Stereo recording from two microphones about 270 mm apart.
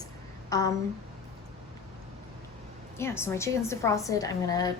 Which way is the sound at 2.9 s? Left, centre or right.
Centre.